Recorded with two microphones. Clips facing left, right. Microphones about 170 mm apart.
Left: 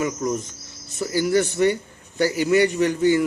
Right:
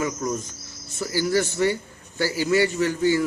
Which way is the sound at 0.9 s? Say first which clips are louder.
Left 2 dB; 20° left (ahead or behind).